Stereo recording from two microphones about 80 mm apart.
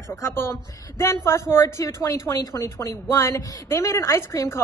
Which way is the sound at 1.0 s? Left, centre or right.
Left.